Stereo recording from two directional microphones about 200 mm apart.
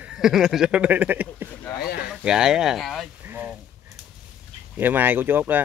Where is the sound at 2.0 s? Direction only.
5° right (ahead or behind).